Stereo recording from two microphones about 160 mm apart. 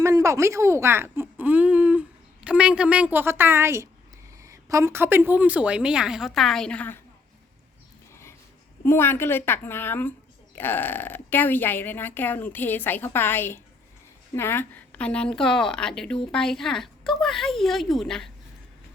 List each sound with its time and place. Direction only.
0.0 s a woman's voice: 20° right (ahead or behind); by 7.0 s 10° left (ahead or behind)
8.1 s a sound: 15° left (ahead or behind)
8.8 s a woman's voice: 15° left (ahead or behind)